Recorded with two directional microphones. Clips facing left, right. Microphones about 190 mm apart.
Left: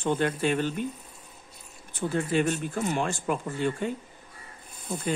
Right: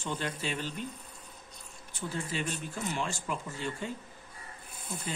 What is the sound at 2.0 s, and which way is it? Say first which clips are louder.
Speech: left 10 dB; 55° left (ahead or behind).